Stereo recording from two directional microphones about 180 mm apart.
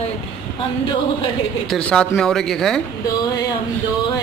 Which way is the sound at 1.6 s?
5° left (ahead or behind).